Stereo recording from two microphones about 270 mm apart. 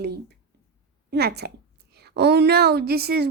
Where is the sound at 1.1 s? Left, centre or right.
Right.